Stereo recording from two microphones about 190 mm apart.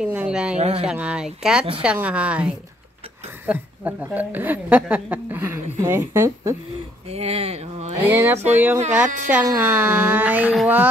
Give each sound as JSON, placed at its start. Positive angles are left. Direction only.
{"t": 0.0, "sound": "speech", "side_deg": -5}
{"t": 0.6, "sound": "speech", "side_deg": -30}
{"t": 0.8, "sound": "a woman's voice", "side_deg": -5}
{"t": 7.1, "sound": "speech", "side_deg": -35}
{"t": 8.0, "sound": "a woman's voice", "side_deg": -10}